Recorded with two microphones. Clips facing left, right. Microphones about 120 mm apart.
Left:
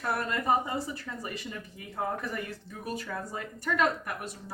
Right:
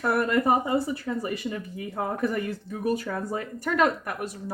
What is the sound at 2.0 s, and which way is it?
Speech, 70° right (ahead or behind).